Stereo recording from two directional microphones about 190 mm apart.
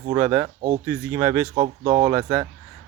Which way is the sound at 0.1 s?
15° right (ahead or behind).